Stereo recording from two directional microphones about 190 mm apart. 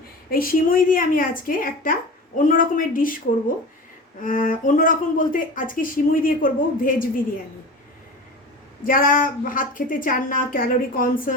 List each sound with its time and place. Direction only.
0.3 s speech: 50° left (ahead or behind)
4.2 s speech: 45° left (ahead or behind)
8.8 s speech: 45° left (ahead or behind)